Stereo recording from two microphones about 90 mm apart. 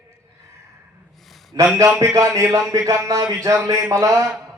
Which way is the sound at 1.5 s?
50° right (ahead or behind).